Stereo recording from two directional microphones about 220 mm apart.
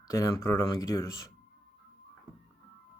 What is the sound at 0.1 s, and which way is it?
Speech, 15° left (ahead or behind).